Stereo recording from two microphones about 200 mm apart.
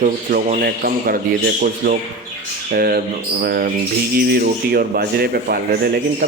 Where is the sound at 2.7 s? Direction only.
50° right (ahead or behind).